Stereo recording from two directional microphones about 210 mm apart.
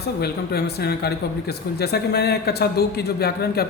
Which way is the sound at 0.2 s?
50° left (ahead or behind).